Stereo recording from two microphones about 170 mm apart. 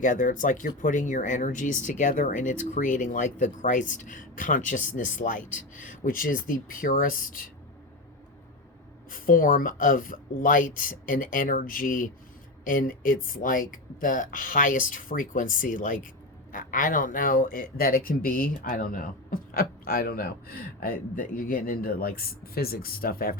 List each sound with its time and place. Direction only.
0.0 s speech: 50° left (ahead or behind)
9.0 s speech: 55° left (ahead or behind)